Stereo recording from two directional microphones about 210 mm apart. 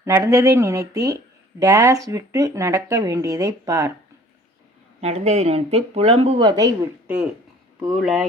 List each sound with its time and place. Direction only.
0.0 s speech: 15° right (ahead or behind)
4.9 s speech: 30° right (ahead or behind)
7.8 s speech: centre (ahead or behind)